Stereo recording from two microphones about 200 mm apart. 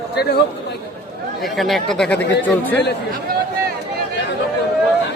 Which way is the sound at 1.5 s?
Centre (ahead or behind).